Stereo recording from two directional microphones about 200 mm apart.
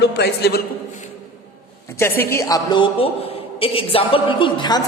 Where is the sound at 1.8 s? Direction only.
10° left (ahead or behind).